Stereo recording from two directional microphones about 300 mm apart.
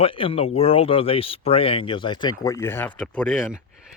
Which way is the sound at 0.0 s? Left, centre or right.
Centre.